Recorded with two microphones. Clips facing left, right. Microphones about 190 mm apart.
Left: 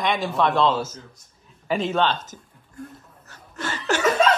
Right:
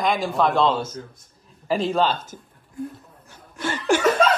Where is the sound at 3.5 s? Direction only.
10° right (ahead or behind).